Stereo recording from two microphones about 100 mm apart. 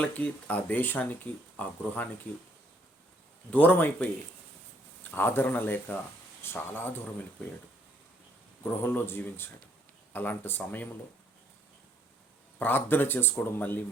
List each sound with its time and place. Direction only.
0.0 s speech: 15° left (ahead or behind)
3.5 s speech: 15° left (ahead or behind)
5.1 s speech: 20° left (ahead or behind)
8.6 s speech: 20° left (ahead or behind)
12.5 s speech: 20° left (ahead or behind)